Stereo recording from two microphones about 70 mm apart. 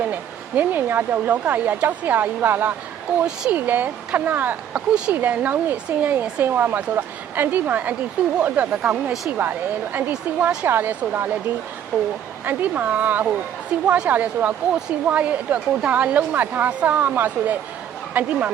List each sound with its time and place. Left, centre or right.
0.0 s speech: right
3.2 s speech: centre
4.7 s speech: centre
5.1 s speech: right
9.4 s speech: right